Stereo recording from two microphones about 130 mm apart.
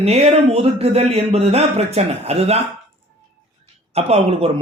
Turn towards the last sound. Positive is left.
turn(degrees=-50)  # may be behind; listen again after turning